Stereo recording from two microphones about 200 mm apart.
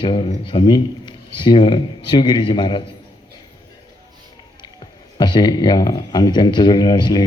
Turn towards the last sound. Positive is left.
turn(degrees=20)  # may be behind; listen again after turning